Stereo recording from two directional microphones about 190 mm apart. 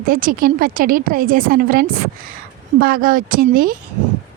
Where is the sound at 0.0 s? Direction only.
45° right (ahead or behind).